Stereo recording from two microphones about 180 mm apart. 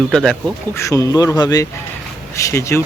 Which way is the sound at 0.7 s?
15° left (ahead or behind).